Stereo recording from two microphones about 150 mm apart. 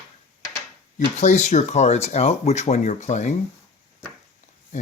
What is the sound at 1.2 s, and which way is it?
Speech, 50° left (ahead or behind).